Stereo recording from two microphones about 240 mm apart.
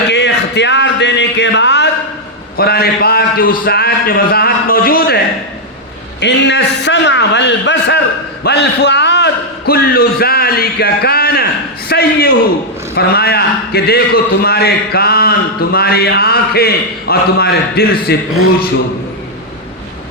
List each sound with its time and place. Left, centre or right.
0.1 s a man's voice: left